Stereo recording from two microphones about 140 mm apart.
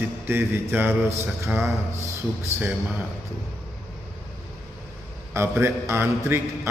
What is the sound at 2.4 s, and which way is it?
Speech, 10° right (ahead or behind).